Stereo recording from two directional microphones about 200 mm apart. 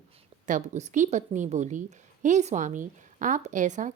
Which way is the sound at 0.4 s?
40° right (ahead or behind).